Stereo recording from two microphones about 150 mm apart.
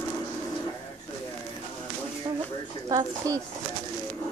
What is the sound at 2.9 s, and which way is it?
Speech, 20° right (ahead or behind).